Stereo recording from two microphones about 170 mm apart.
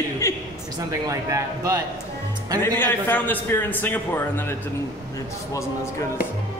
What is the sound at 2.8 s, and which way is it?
A man's voice, 10° left (ahead or behind).